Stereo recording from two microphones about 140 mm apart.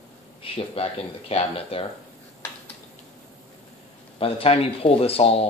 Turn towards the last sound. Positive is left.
turn(degrees=45)  # may be behind; listen again after turning